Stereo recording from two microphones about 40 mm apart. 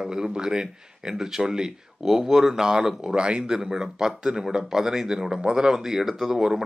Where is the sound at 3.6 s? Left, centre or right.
Centre.